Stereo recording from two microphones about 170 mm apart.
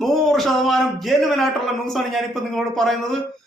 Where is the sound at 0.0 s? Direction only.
Centre (ahead or behind).